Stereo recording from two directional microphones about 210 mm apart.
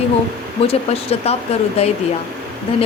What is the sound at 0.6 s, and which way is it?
Speech, 30° left (ahead or behind).